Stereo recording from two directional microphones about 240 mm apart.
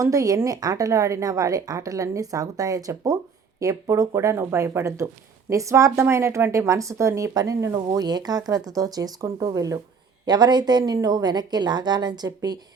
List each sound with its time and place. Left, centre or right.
0.0 s a woman's voice: centre